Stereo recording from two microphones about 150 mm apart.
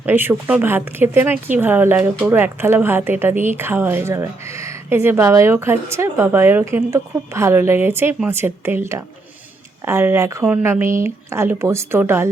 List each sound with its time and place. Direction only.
0.0 s speech: 15° right (ahead or behind)